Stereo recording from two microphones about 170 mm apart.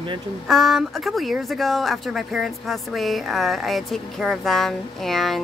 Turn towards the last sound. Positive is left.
turn(degrees=0)  # may be behind; listen again after turning